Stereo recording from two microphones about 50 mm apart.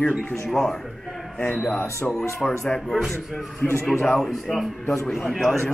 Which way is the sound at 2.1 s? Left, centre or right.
Left.